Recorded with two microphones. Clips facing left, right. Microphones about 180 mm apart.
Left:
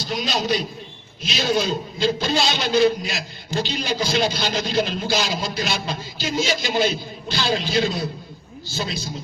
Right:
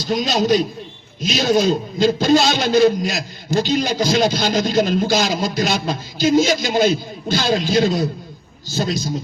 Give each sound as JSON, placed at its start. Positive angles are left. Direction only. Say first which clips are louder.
{"t": 0.0, "sound": "a man's voice", "louder": "right 6 dB", "side_deg": -45}